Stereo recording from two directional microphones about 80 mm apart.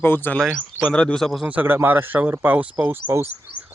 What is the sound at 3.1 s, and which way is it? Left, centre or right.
Speech, right.